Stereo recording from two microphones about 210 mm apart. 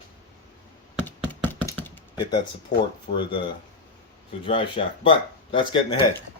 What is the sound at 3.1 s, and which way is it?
Speech, 45° left (ahead or behind).